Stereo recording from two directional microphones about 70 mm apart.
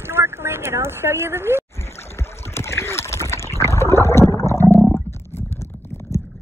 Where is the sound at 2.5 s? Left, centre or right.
Left.